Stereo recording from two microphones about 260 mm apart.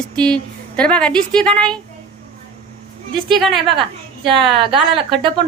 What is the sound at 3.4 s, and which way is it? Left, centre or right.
Speech, centre.